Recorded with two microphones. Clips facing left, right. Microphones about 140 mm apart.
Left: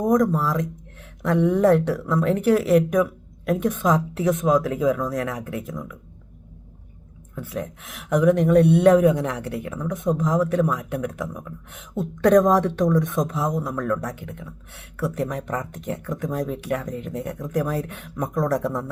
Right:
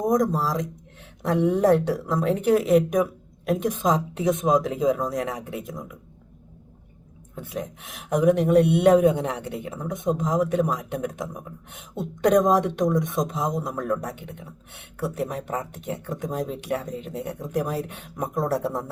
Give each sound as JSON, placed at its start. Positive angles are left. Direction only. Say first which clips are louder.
{"t": 0.0, "sound": "speech", "louder": "left 2 dB", "side_deg": -20}
{"t": 7.3, "sound": "speech", "louder": "left 2 dB", "side_deg": -20}
{"t": 16.0, "sound": "speech", "louder": "left 2 dB", "side_deg": -20}